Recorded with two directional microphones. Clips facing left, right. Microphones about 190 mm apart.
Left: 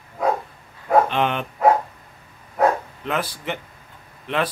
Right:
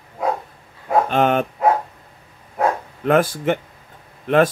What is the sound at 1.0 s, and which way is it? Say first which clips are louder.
Speech: right 5 dB; 45° right (ahead or behind).